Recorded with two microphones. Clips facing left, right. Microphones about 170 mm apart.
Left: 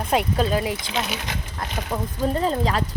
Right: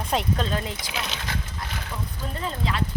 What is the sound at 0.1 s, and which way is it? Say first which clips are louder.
Speech: left 5 dB; 5° left (ahead or behind).